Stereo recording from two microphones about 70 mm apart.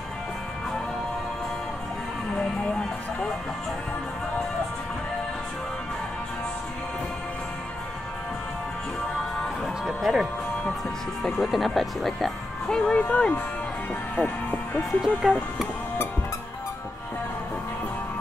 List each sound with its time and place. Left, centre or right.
2.3 s music: centre
9.4 s music: centre
11.3 s speech: centre
14.8 s speech: centre